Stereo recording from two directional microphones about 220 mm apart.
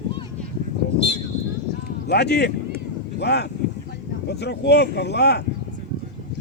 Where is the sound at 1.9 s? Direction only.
45° left (ahead or behind).